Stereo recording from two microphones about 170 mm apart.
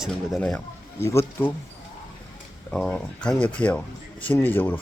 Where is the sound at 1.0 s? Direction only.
15° left (ahead or behind).